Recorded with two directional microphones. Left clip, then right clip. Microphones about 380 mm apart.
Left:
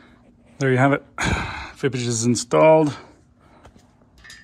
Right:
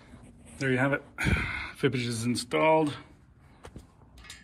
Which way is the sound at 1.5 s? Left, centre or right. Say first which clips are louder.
Left 4 dB; centre.